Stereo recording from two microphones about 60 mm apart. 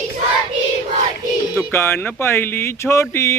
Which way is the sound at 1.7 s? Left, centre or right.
Left.